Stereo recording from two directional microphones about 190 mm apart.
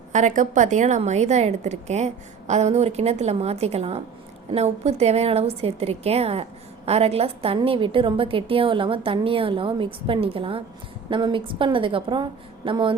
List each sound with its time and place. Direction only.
0.1 s a woman's voice: 40° right (ahead or behind); by 12.9 s 25° right (ahead or behind)